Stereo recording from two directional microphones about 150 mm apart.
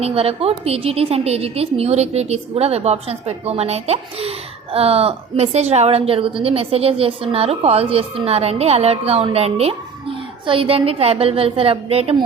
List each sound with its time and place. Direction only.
0.0 s a woman's voice: 40° right (ahead or behind)